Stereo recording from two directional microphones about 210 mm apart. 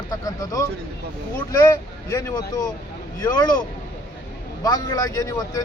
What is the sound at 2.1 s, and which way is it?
Speech, 15° left (ahead or behind).